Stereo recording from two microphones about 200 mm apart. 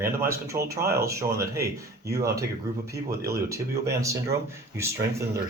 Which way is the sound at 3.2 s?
15° right (ahead or behind).